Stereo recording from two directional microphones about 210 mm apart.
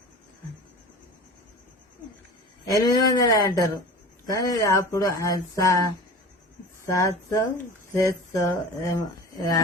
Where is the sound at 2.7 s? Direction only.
15° left (ahead or behind).